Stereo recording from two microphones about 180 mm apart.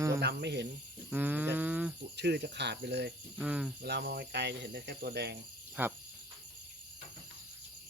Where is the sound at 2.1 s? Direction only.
70° right (ahead or behind).